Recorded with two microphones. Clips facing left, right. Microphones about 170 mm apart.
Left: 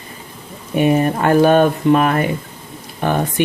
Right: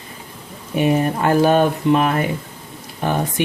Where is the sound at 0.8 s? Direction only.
60° left (ahead or behind).